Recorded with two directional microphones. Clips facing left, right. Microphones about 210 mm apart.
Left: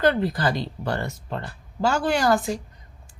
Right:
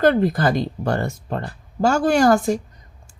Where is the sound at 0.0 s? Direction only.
50° right (ahead or behind).